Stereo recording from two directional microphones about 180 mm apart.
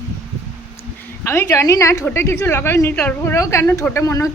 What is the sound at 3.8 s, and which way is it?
Music, 20° left (ahead or behind).